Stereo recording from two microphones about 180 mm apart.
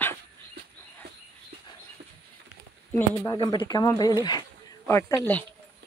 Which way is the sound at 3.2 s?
20° left (ahead or behind).